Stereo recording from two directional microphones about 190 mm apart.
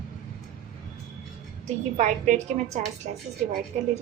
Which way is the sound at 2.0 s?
40° right (ahead or behind).